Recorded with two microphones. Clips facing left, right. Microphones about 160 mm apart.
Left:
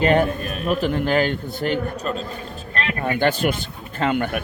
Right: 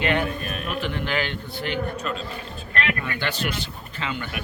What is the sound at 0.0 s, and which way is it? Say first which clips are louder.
A man's voice: left 6 dB; 40° left (ahead or behind).